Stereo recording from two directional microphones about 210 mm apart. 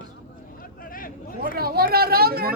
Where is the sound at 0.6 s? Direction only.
40° left (ahead or behind).